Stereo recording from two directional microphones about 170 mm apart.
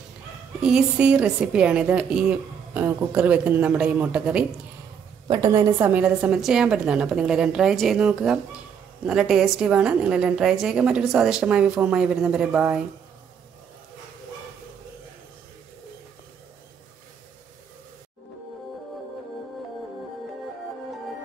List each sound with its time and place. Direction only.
0.6 s a woman's voice: 5° right (ahead or behind)
5.3 s a woman's voice: 25° right (ahead or behind)
5.8 s a woman's voice: 10° right (ahead or behind)